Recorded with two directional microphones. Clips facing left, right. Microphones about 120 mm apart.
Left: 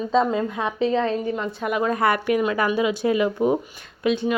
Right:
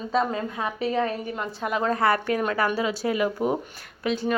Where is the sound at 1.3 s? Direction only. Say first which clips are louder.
Left 4 dB; 20° right (ahead or behind).